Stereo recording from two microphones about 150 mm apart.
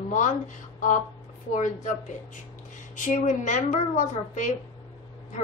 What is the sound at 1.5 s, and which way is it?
Speech, 50° left (ahead or behind).